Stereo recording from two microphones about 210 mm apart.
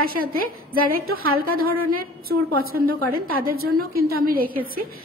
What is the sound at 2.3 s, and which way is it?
A woman's voice, 45° right (ahead or behind).